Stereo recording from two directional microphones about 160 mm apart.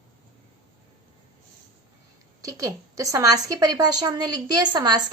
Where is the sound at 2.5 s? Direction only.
20° right (ahead or behind).